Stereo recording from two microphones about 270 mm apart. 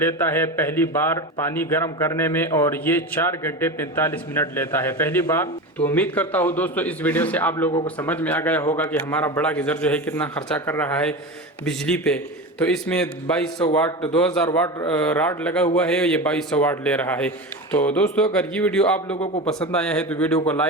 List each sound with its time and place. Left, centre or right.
0.0 s a man's voice: centre
19.1 s a man's voice: left
19.5 s a man's voice: centre